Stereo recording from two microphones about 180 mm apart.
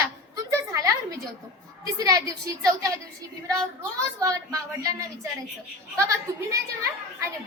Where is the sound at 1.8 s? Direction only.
20° right (ahead or behind).